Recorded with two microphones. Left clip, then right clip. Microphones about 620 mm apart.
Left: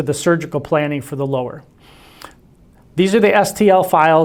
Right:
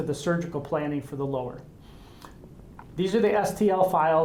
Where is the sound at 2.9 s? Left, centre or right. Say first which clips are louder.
Left 11 dB; left.